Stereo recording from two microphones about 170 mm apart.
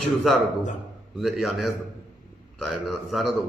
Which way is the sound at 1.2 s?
Centre (ahead or behind).